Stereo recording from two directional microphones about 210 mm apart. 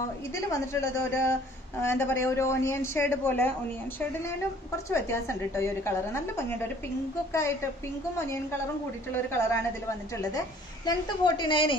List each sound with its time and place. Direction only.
0.5 s a woman's voice: 10° left (ahead or behind)
4.9 s a woman's voice: 15° left (ahead or behind)
9.1 s a woman's voice: 10° left (ahead or behind)